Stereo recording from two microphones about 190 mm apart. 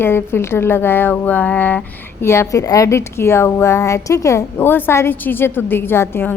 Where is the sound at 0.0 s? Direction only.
10° left (ahead or behind).